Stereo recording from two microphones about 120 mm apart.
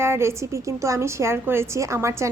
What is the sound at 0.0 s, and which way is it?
A woman's voice, 20° right (ahead or behind).